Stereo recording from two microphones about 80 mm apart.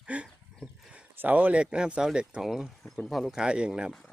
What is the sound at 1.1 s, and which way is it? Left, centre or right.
Speech, right.